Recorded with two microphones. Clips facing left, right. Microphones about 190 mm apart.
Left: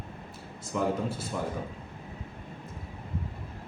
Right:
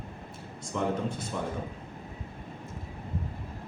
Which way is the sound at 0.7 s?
5° left (ahead or behind).